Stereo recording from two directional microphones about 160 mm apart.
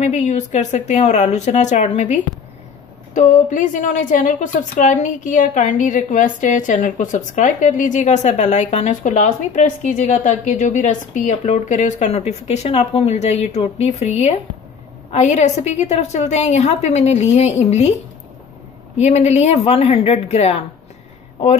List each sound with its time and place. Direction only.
0.0 s a woman's voice: 45° left (ahead or behind)
3.2 s a woman's voice: 50° left (ahead or behind)
18.9 s a woman's voice: 45° left (ahead or behind)